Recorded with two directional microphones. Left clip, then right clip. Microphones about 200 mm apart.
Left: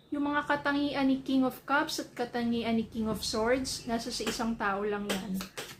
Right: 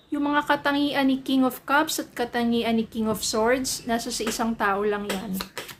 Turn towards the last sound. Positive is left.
turn(degrees=-30)  # may be behind; listen again after turning